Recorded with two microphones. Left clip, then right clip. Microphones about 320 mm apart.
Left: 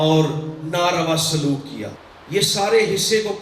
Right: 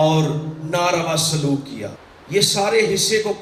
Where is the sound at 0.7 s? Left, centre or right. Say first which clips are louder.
Even; centre.